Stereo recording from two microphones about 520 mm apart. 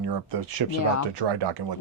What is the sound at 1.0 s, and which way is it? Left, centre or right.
Speech, right.